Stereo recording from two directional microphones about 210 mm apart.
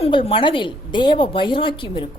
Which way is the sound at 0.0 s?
25° left (ahead or behind).